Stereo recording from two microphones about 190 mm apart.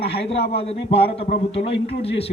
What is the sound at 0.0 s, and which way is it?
Speech, 30° left (ahead or behind).